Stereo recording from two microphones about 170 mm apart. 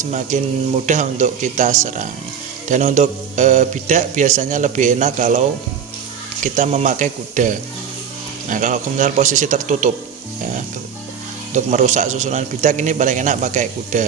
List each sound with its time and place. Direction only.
0.0 s speech: 45° right (ahead or behind)
6.4 s speech: 45° right (ahead or behind)
11.5 s speech: 45° right (ahead or behind)